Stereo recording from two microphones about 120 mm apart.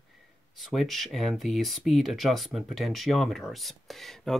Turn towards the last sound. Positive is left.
turn(degrees=5)  # may be behind; listen again after turning